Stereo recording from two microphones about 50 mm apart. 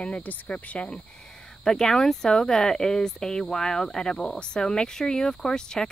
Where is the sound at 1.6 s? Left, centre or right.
Centre.